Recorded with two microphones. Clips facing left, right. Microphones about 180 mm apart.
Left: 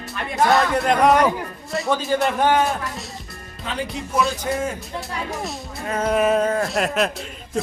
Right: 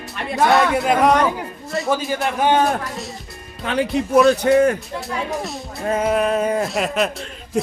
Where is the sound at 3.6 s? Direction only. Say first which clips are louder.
Right 8 dB; 65° right (ahead or behind).